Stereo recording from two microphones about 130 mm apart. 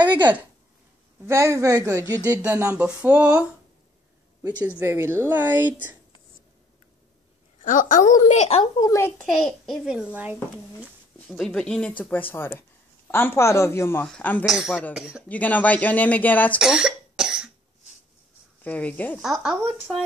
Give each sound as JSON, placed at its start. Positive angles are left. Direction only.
{"t": 0.2, "sound": "speech", "side_deg": -15}
{"t": 7.6, "sound": "a woman's voice", "side_deg": 85}
{"t": 8.8, "sound": "speech", "side_deg": 20}
{"t": 9.2, "sound": "a child's voice", "side_deg": 0}
{"t": 11.2, "sound": "a child's voice", "side_deg": 0}
{"t": 14.4, "sound": "a child's voice", "side_deg": 0}
{"t": 15.2, "sound": "speech", "side_deg": 10}
{"t": 16.5, "sound": "cough", "side_deg": -5}
{"t": 18.6, "sound": "speech", "side_deg": 10}
{"t": 19.2, "sound": "a child's voice", "side_deg": 0}